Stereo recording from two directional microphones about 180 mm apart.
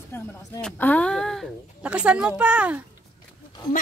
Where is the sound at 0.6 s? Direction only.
10° left (ahead or behind); by 2.8 s 5° right (ahead or behind).